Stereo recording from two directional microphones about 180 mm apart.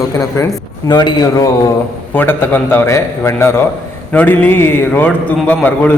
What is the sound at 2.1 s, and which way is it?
A man's voice, 10° left (ahead or behind).